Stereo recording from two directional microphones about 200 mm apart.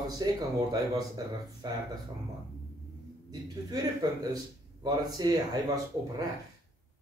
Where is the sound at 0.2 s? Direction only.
20° right (ahead or behind).